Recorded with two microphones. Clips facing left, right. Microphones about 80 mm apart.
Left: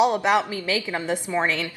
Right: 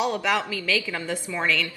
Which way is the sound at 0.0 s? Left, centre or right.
Left.